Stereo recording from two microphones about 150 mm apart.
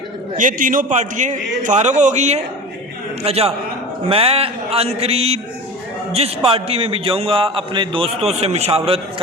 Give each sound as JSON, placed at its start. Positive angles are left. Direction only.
{"t": 0.3, "sound": "a man's voice", "side_deg": -60}